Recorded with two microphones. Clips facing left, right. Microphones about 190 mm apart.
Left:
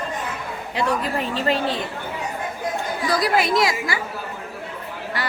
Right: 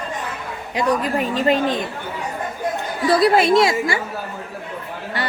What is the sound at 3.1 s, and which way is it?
Speech, 25° right (ahead or behind).